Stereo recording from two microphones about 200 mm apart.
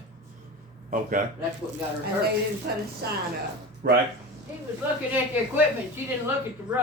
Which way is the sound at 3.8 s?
55° right (ahead or behind).